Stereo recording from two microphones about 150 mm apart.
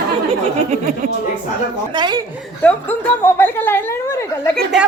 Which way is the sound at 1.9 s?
30° right (ahead or behind).